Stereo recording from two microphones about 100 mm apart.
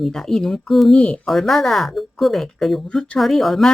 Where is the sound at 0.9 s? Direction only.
10° left (ahead or behind).